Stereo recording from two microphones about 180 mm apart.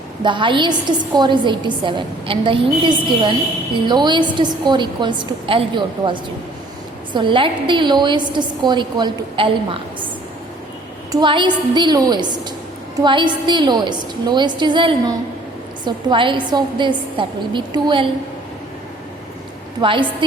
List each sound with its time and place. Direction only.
0.2 s a woman's voice: 25° right (ahead or behind)
11.1 s a woman's voice: 25° right (ahead or behind)
19.8 s a woman's voice: 30° right (ahead or behind)